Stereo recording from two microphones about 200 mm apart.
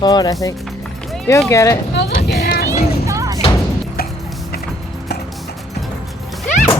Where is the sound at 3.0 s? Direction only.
15° right (ahead or behind).